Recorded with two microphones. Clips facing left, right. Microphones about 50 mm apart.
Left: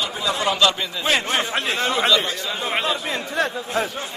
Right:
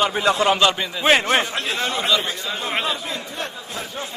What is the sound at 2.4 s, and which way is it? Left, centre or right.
Speech, centre.